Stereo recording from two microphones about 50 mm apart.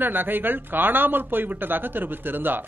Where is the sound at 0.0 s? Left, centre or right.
Right.